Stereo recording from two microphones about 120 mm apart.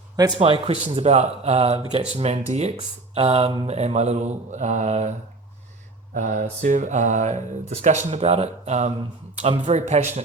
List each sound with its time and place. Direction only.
0.3 s speech: 50° right (ahead or behind)
3.2 s speech: 55° right (ahead or behind)
3.7 s speech: 65° right (ahead or behind)
6.1 s speech: 90° right; by 10.0 s 70° right (ahead or behind)